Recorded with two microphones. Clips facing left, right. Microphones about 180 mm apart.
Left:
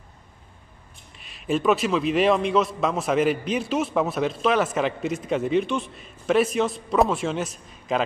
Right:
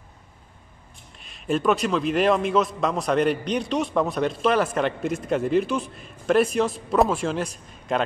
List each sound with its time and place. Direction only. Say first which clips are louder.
1.1 s a man's voice: even; centre (ahead or behind)